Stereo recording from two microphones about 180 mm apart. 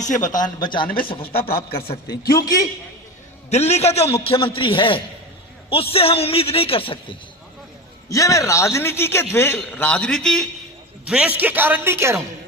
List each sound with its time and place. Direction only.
0.0 s speech: 45° left (ahead or behind)
0.4 s a man's voice: 25° left (ahead or behind)
2.4 s speech: 20° left (ahead or behind)
3.5 s a man's voice: 35° left (ahead or behind)
8.1 s a man's voice: 15° left (ahead or behind); by 12.2 s 15° right (ahead or behind)